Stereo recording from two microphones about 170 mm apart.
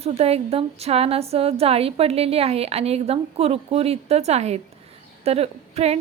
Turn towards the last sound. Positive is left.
turn(degrees=-35)  # may be behind; listen again after turning